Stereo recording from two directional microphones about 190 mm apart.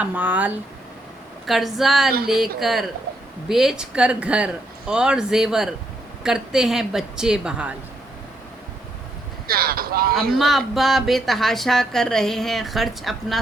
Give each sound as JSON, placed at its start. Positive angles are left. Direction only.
{"t": 0.0, "sound": "speech", "side_deg": -10}
{"t": 9.5, "sound": "speech", "side_deg": -50}
{"t": 10.2, "sound": "speech", "side_deg": 0}